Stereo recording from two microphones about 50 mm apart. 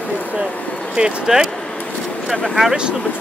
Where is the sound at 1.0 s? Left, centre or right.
Right.